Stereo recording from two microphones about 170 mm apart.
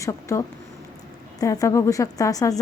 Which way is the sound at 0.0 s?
20° left (ahead or behind).